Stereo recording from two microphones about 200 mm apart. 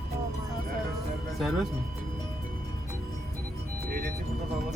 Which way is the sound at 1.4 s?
Centre (ahead or behind).